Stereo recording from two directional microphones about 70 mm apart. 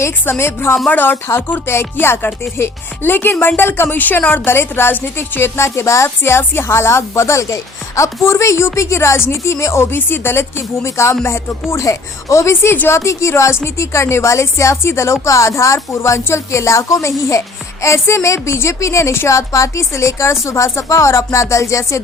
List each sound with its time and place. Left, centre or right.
0.0 s a woman's voice: left
0.9 s music: left
1.7 s a woman's voice: left